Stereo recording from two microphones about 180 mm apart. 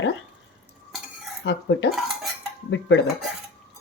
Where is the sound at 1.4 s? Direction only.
70° left (ahead or behind).